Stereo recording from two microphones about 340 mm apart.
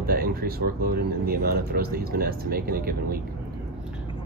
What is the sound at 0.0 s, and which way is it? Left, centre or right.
Speech, right.